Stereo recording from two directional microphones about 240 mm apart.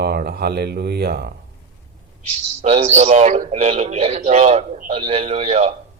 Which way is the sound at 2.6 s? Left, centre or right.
Right.